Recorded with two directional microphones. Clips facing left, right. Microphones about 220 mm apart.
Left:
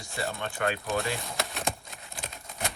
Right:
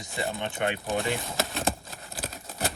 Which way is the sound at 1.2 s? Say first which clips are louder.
Right 4 dB; centre (ahead or behind).